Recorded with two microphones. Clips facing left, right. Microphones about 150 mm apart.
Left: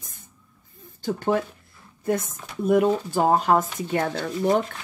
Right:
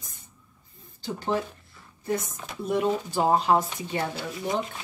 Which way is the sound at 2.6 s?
50° left (ahead or behind).